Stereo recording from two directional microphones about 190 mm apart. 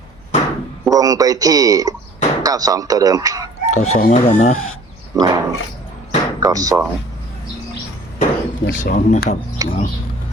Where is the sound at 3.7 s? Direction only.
35° left (ahead or behind).